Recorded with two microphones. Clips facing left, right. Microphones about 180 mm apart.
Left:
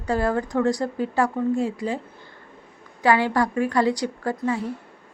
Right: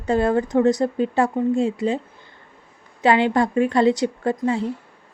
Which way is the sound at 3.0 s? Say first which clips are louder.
Right 3 dB; 20° right (ahead or behind).